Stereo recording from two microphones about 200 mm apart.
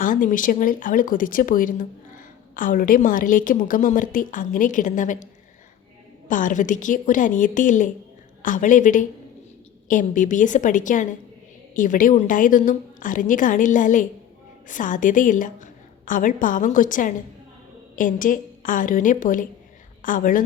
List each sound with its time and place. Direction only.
0.0 s a woman's voice: 40° left (ahead or behind)